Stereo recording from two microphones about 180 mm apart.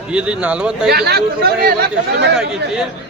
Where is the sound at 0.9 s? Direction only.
65° right (ahead or behind).